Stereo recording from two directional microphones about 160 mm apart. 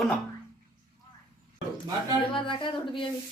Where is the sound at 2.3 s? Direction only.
30° left (ahead or behind).